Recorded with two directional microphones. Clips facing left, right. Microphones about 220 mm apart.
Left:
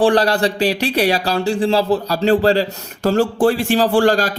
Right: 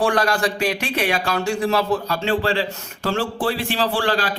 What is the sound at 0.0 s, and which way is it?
A man's voice, 35° left (ahead or behind).